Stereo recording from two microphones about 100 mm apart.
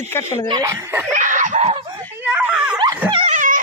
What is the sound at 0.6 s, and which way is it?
Speech, 25° right (ahead or behind).